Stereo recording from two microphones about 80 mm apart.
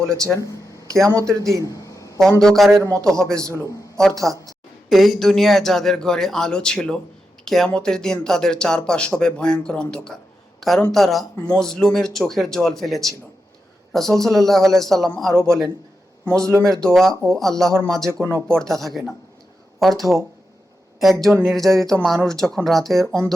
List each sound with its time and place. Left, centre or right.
1.0 s speech: right
1.6 s a sound: left
2.4 s a man's voice: centre
16.4 s speech: right
16.6 s a man's voice: centre
18.1 s speech: right
18.6 s a man's voice: centre